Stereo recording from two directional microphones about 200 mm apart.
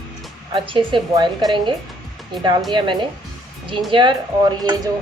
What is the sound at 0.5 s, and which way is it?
A woman's voice, 25° right (ahead or behind).